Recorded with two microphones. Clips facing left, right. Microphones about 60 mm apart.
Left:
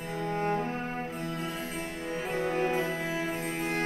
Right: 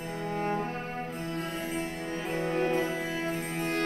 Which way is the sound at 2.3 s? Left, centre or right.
Centre.